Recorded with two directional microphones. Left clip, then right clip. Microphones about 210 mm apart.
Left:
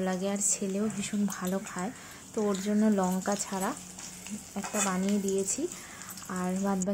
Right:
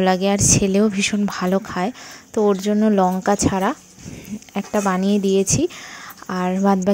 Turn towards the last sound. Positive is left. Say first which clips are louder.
# right 13 dB
turn(degrees=-40)  # may be behind; listen again after turning